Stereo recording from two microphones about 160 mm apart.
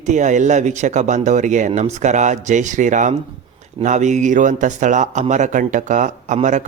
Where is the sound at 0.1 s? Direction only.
50° right (ahead or behind).